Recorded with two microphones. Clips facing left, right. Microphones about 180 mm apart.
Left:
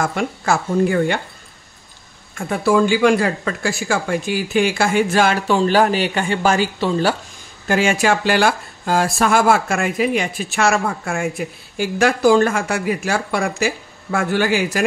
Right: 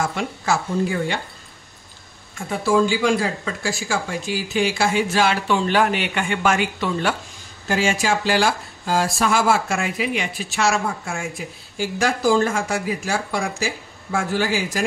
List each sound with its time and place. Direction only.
0.0 s speech: 55° left (ahead or behind)
2.3 s speech: 60° left (ahead or behind); by 7.2 s 35° left (ahead or behind)
7.6 s speech: 60° left (ahead or behind)